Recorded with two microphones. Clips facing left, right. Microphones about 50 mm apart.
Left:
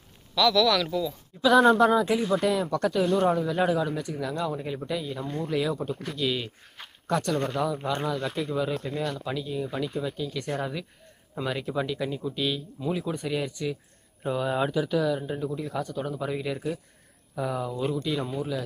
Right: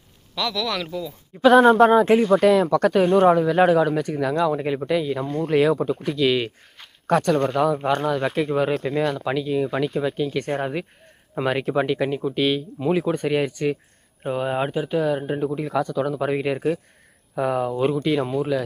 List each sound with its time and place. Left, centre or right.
0.3 s speech: right
1.4 s speech: right
2.3 s speech: right
6.6 s a sound: centre
7.1 s speech: right
8.7 s speech: right
10.4 s speech: right
11.3 s speech: right
14.3 s speech: right
15.8 s speech: right
16.2 s speech: right